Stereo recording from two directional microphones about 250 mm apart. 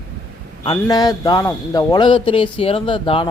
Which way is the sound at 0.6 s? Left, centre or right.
Centre.